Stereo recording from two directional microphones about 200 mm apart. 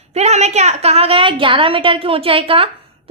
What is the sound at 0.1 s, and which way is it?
A woman's voice, 35° right (ahead or behind).